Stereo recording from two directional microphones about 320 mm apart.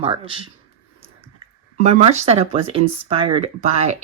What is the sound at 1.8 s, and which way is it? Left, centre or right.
Speech, centre.